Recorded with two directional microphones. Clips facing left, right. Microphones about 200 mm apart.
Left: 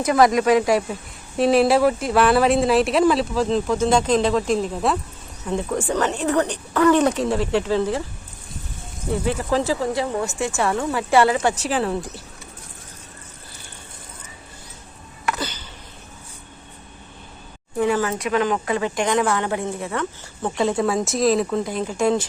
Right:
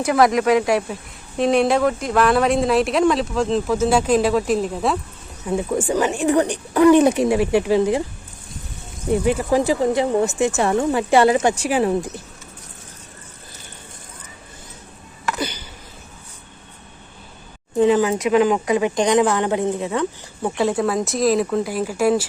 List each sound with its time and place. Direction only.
0.0 s speech: 5° right (ahead or behind)
9.0 s speech: 15° right (ahead or behind)
15.4 s a sound: 10° right (ahead or behind)
17.7 s speech: 20° right (ahead or behind)
20.6 s speech: 5° right (ahead or behind)